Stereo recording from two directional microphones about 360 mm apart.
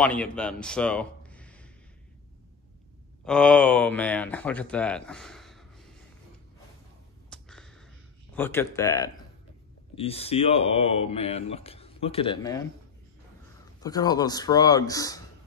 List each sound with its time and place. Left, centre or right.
0.0 s a man's voice: centre
3.3 s speech: centre
7.2 s a sound: centre
8.4 s speech: centre
13.7 s speech: centre